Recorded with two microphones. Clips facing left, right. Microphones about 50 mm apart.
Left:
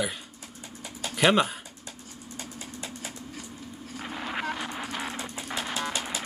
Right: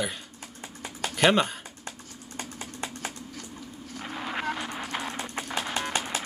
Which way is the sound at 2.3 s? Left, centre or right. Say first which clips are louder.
Right 4 dB; right.